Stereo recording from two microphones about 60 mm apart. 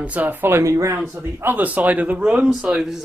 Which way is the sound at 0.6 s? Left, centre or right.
Right.